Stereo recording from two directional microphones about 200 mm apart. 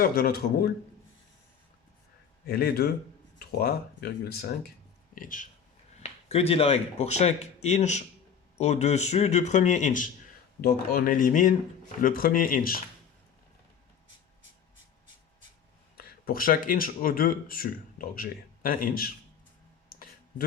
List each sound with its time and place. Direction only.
0.0 s speech: 50° left (ahead or behind)
2.5 s speech: 50° left (ahead or behind)
6.0 s speech: 30° left (ahead or behind)
10.6 s speech: 50° left (ahead or behind)
16.0 s speech: 50° left (ahead or behind)